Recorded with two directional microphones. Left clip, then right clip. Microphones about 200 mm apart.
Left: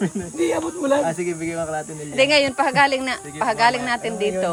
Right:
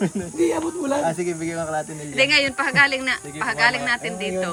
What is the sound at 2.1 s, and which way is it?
Speech, 15° left (ahead or behind).